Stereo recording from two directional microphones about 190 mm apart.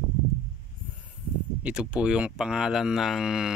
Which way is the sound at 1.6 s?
5° right (ahead or behind).